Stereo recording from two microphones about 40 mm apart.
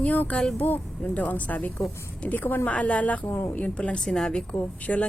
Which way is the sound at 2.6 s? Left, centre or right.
Left.